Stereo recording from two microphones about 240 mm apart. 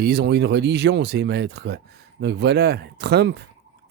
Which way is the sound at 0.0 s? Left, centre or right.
Right.